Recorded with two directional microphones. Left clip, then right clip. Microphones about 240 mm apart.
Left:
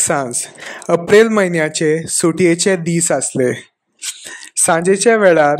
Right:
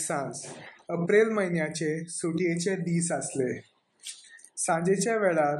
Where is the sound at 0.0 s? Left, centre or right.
Left.